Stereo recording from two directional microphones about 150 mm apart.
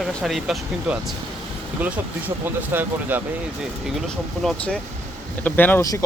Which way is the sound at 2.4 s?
15° right (ahead or behind).